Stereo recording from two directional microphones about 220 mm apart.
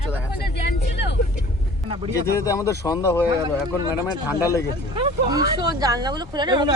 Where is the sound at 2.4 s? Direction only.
15° left (ahead or behind).